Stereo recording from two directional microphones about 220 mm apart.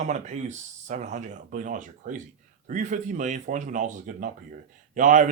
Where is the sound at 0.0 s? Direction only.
35° right (ahead or behind).